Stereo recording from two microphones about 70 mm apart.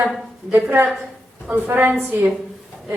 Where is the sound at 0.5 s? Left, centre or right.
Right.